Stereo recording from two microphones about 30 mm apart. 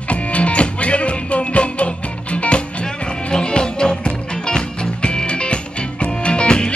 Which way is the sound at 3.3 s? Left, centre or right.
Left.